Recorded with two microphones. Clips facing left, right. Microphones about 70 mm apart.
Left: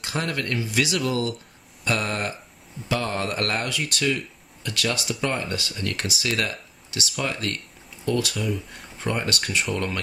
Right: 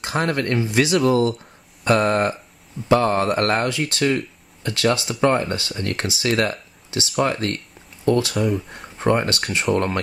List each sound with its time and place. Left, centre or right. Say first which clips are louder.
0.0 s speech: right 6 dB; right